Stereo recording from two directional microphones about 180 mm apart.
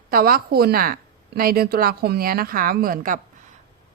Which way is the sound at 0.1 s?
55° right (ahead or behind).